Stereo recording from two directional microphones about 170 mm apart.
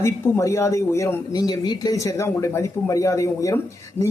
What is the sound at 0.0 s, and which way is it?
A man's voice, 15° left (ahead or behind).